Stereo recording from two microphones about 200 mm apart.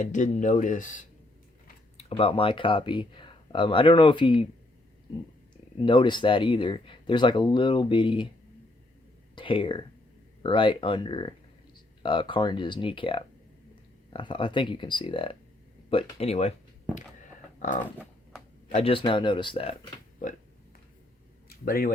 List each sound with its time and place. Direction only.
0.0 s speech: 40° left (ahead or behind)
2.0 s speech: 30° left (ahead or behind)
5.8 s speech: 25° left (ahead or behind)
9.3 s speech: 25° left (ahead or behind)
17.6 s speech: 40° left (ahead or behind)
20.2 s speech: 40° left (ahead or behind)
21.5 s speech: 45° left (ahead or behind)